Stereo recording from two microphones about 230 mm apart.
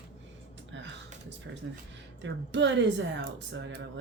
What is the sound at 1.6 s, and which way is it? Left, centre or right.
Speech, right.